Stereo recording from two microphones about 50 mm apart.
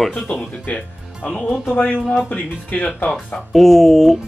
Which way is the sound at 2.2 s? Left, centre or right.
Left.